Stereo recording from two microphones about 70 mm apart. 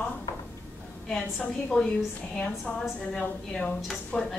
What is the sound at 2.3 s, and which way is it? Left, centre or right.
A woman's voice, centre.